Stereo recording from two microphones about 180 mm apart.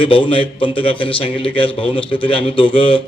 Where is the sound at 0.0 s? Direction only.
30° left (ahead or behind).